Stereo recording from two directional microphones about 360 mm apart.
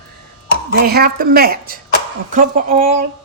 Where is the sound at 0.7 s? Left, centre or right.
Right.